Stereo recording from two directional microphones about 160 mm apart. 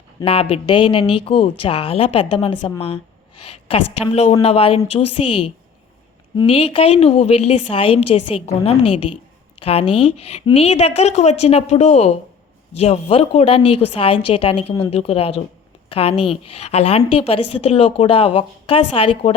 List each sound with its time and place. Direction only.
0.2 s a woman's voice: 35° left (ahead or behind)